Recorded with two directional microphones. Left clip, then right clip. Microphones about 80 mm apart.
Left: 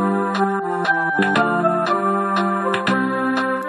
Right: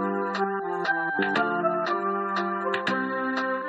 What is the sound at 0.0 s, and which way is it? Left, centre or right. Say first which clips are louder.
Music: left 7 dB; left.